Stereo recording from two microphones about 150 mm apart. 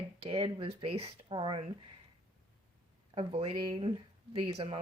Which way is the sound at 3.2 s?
40° right (ahead or behind).